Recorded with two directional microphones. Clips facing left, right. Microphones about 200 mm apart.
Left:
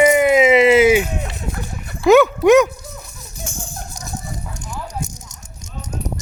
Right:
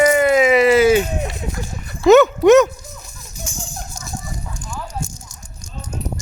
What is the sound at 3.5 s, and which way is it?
Music, 60° left (ahead or behind).